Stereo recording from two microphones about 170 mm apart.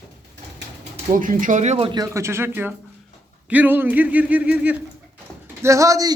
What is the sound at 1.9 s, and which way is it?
A woman's voice, 20° right (ahead or behind).